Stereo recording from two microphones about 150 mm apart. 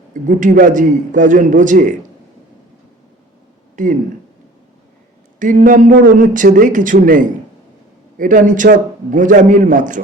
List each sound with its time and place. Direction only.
0.1 s a man's voice: 60° right (ahead or behind)
3.8 s a man's voice: 60° right (ahead or behind)
5.4 s a man's voice: 60° right (ahead or behind)